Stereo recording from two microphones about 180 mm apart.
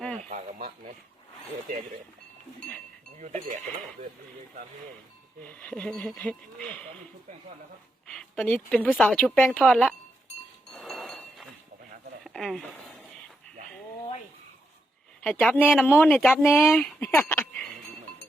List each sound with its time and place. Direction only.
0.2 s a sound: 45° right (ahead or behind)
2.6 s music: 10° left (ahead or behind)
3.2 s sheep: 40° right (ahead or behind)
5.4 s speech: 10° left (ahead or behind)
8.0 s a woman's voice: 5° left (ahead or behind)
10.7 s chink: centre (ahead or behind)
12.2 s a sound: centre (ahead or behind)
15.2 s speech: 5° left (ahead or behind)
16.8 s a sound: 10° left (ahead or behind)